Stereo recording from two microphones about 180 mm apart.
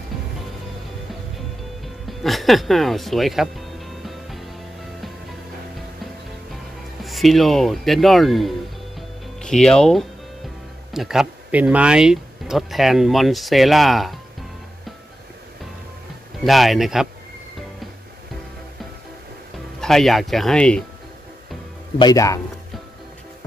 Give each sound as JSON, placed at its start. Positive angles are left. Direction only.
{"t": 2.0, "sound": "music", "side_deg": 0}
{"t": 6.5, "sound": "music", "side_deg": 0}
{"t": 10.9, "sound": "speech", "side_deg": 0}
{"t": 16.4, "sound": "speech", "side_deg": 0}
{"t": 19.8, "sound": "speech", "side_deg": 0}
{"t": 21.9, "sound": "speech", "side_deg": 20}